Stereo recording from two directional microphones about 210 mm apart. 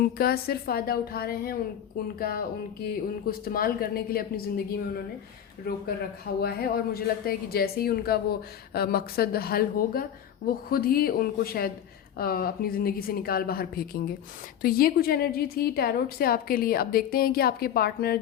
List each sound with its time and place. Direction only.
0.0 s speech: 45° left (ahead or behind)
5.6 s speech: 50° left (ahead or behind)